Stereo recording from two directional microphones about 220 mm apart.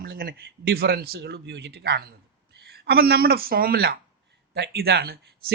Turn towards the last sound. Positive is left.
turn(degrees=-45)  # may be behind; listen again after turning